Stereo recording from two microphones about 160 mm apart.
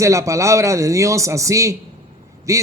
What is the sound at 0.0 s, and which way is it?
A man's voice, 20° right (ahead or behind).